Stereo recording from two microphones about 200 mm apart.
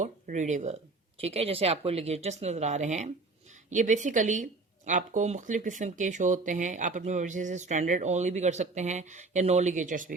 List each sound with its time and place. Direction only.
0.0 s speech: 35° right (ahead or behind)